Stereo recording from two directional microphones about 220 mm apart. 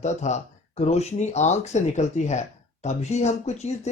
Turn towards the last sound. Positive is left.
turn(degrees=30)  # may be behind; listen again after turning